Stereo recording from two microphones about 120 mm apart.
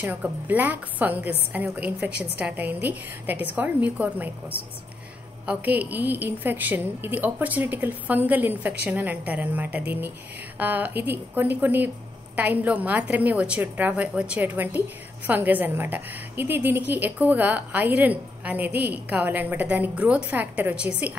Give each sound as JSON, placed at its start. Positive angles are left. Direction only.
{"t": 0.0, "sound": "a woman's voice", "side_deg": -15}
{"t": 5.5, "sound": "a woman's voice", "side_deg": -15}